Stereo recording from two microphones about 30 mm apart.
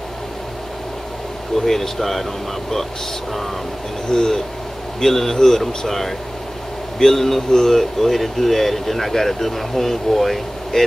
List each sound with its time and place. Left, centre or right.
1.6 s speech: centre
4.1 s speech: centre